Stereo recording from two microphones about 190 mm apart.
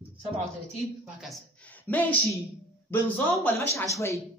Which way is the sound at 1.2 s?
5° left (ahead or behind).